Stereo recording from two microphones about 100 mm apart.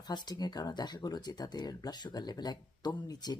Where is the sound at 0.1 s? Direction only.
45° left (ahead or behind).